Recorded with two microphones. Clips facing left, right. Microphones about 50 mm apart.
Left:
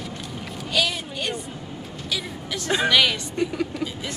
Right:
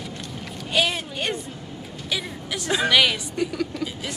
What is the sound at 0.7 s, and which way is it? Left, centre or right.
Speech, right.